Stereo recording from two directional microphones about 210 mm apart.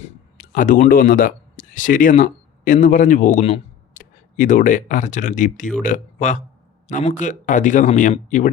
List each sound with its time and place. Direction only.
0.3 s speech: 40° left (ahead or behind)